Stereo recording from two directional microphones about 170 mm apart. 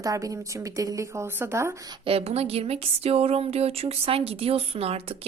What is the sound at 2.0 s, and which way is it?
Speech, 35° right (ahead or behind).